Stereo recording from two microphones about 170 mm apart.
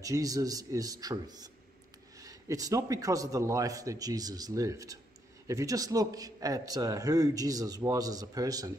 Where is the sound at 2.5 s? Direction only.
20° right (ahead or behind).